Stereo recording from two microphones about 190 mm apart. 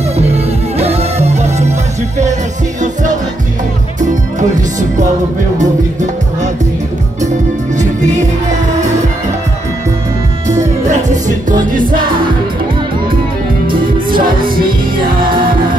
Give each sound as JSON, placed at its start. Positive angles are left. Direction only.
{"t": 0.3, "sound": "music", "side_deg": -35}
{"t": 4.1, "sound": "music", "side_deg": -40}
{"t": 7.2, "sound": "music", "side_deg": -40}
{"t": 10.6, "sound": "music", "side_deg": -40}
{"t": 13.7, "sound": "music", "side_deg": -50}